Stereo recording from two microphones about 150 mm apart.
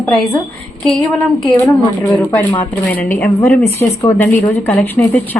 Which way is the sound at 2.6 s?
10° left (ahead or behind).